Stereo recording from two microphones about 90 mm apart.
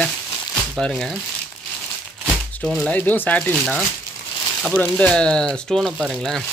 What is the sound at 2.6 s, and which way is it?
Speech, 5° left (ahead or behind).